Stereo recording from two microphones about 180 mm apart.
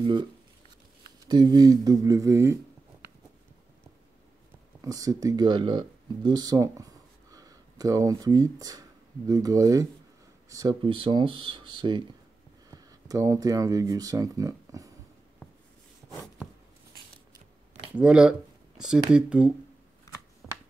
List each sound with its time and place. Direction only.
0.0 s speech: 25° right (ahead or behind)
1.3 s speech: 20° right (ahead or behind)
4.8 s speech: 20° right (ahead or behind)
17.9 s speech: 5° right (ahead or behind)
20.4 s computer keyboard: 5° left (ahead or behind)